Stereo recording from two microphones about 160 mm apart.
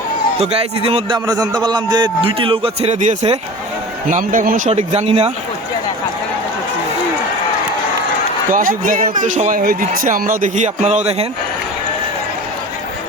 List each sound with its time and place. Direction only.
0.3 s a man's voice: 40° right (ahead or behind)
1.3 s a man's voice: 25° right (ahead or behind); by 4.7 s 55° right (ahead or behind)
4.7 s a man's voice: 40° right (ahead or behind)
8.4 s a man's voice: 55° right (ahead or behind)